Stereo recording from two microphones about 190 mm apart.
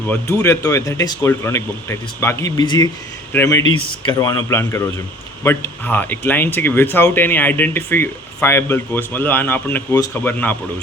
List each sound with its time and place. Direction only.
0.1 s speech: 15° left (ahead or behind)